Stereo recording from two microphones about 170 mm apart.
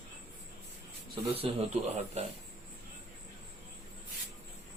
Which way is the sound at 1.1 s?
35° right (ahead or behind).